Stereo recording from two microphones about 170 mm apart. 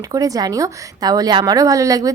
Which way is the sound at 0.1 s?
20° right (ahead or behind).